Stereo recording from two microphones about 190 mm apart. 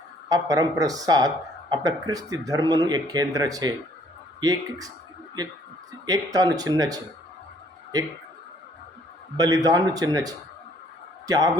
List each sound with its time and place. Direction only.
0.3 s speech: 20° right (ahead or behind)
6.1 s speech: 20° right (ahead or behind)
9.4 s speech: 20° right (ahead or behind)